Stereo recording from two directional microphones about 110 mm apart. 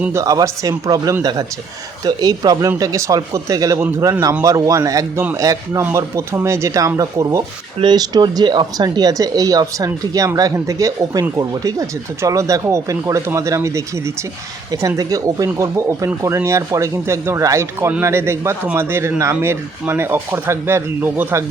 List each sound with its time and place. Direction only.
0.1 s speech: 30° right (ahead or behind)